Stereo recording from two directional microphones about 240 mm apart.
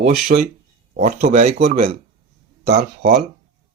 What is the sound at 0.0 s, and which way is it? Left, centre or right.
Speech, right.